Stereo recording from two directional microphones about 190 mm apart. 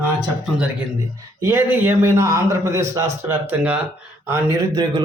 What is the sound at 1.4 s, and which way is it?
A man's voice, 10° right (ahead or behind).